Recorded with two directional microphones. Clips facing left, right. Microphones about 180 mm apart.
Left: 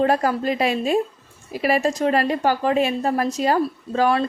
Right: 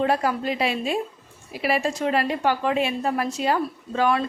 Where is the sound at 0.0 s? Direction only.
45° left (ahead or behind).